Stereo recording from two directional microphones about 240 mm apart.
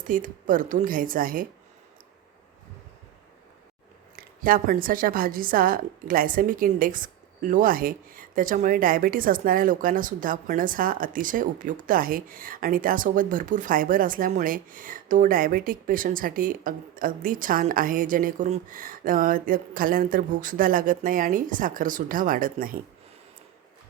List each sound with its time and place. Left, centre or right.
0.1 s a woman's voice: right
4.4 s a woman's voice: right